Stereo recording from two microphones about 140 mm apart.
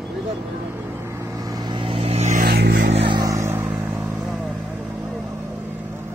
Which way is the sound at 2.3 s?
80° right.